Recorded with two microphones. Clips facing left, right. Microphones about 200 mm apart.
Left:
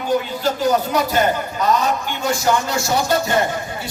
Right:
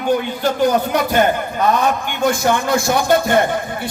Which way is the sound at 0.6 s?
55° right (ahead or behind).